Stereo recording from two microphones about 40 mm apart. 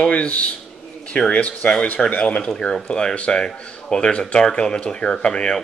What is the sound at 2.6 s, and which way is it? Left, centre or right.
Speech, left.